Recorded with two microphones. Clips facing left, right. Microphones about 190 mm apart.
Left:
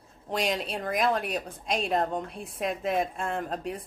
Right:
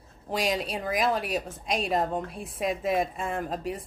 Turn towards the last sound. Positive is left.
turn(degrees=0)  # may be behind; listen again after turning